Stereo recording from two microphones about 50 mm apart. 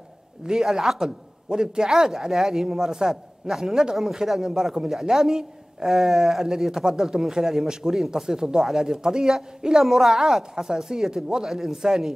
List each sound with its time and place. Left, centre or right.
0.5 s a man's voice: centre